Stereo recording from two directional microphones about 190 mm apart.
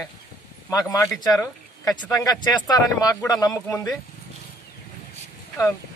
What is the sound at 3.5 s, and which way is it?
Speech, 5° left (ahead or behind).